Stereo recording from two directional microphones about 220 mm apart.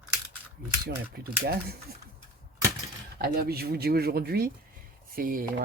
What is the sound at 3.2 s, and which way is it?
Speech, 45° right (ahead or behind).